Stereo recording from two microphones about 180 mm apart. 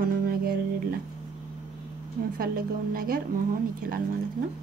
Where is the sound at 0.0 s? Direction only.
50° right (ahead or behind).